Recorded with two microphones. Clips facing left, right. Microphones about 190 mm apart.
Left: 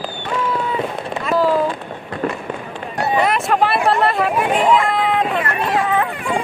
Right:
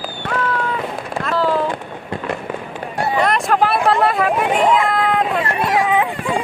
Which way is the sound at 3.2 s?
5° left (ahead or behind).